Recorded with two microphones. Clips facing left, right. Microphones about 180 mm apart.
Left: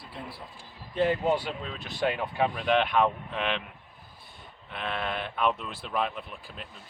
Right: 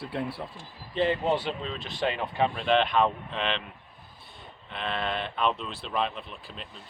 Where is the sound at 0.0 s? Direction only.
65° right (ahead or behind).